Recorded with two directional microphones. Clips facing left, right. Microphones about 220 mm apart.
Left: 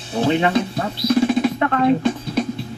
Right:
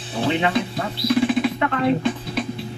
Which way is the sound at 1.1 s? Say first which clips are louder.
Left 2 dB; 45° left (ahead or behind).